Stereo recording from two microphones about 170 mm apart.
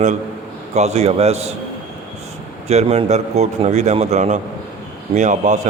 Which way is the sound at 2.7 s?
40° right (ahead or behind).